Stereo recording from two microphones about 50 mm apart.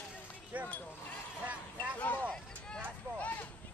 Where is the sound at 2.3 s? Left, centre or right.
Centre.